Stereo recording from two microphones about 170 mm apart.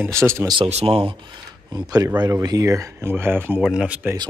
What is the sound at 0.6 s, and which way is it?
Speech, 35° right (ahead or behind).